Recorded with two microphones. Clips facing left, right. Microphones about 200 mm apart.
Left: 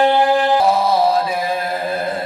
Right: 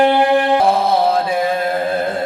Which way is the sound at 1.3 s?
50° right (ahead or behind).